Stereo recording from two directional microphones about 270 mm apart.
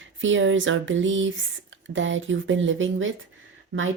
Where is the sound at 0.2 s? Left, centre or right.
Right.